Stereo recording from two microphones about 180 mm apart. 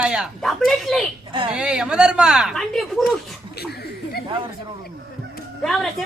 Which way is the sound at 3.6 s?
60° left (ahead or behind).